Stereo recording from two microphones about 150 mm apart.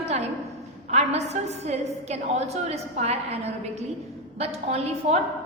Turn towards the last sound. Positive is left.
turn(degrees=-45)  # may be behind; listen again after turning